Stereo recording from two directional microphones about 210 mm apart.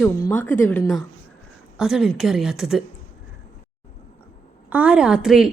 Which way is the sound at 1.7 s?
Centre (ahead or behind).